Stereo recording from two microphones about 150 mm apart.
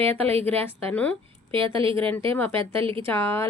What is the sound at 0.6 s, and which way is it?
Speech, 10° left (ahead or behind).